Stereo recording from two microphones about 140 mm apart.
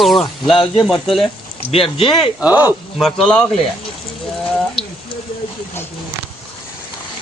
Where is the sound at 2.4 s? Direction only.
10° right (ahead or behind).